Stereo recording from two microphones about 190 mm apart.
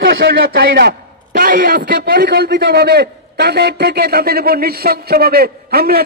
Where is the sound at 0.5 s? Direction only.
55° right (ahead or behind).